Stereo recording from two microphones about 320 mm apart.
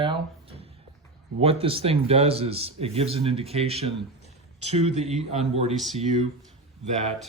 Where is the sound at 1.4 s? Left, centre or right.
Centre.